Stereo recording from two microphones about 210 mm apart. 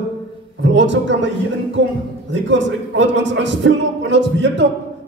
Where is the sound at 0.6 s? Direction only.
60° right (ahead or behind).